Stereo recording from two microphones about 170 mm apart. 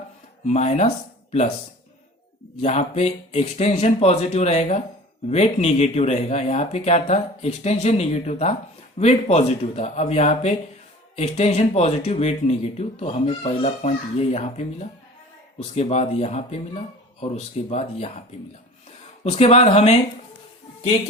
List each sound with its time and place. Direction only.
0.4 s speech: 40° left (ahead or behind)
2.6 s speech: 40° left (ahead or behind)
19.2 s speech: 40° left (ahead or behind)